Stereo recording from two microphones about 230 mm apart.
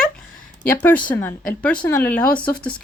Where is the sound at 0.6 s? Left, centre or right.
Centre.